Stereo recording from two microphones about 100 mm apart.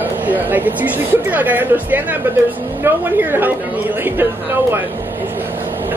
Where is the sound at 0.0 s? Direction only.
20° right (ahead or behind).